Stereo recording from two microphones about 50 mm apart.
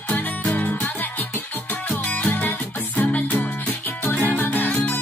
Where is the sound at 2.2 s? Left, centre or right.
Left.